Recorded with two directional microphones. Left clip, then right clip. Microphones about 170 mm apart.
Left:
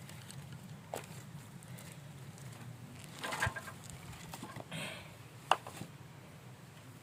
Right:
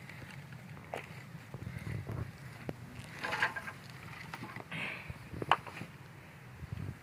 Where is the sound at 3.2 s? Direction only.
40° left (ahead or behind).